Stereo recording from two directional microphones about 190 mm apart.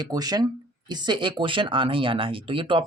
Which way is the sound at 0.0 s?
20° right (ahead or behind).